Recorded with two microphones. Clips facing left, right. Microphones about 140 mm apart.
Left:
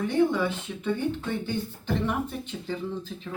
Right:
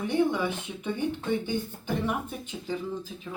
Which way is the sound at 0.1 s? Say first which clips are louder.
Left 1 dB; 15° right (ahead or behind).